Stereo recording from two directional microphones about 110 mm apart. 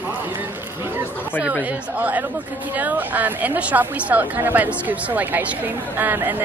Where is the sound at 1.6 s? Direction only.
15° right (ahead or behind).